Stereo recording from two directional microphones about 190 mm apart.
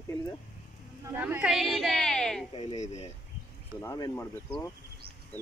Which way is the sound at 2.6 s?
35° left (ahead or behind).